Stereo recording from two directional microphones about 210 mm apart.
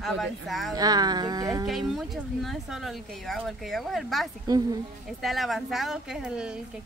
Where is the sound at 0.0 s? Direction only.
Centre (ahead or behind).